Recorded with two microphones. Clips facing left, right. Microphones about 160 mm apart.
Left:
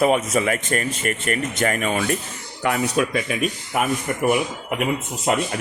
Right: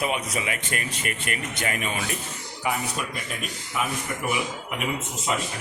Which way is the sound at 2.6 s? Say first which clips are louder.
Left 8 dB; 90° left.